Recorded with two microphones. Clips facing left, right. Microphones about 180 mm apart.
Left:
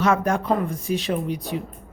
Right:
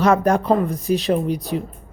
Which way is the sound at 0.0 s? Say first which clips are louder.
Right 4 dB; 35° right (ahead or behind).